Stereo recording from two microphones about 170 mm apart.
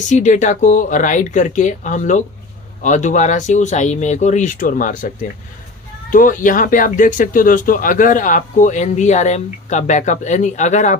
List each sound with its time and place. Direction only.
0.1 s speech: 45° left (ahead or behind)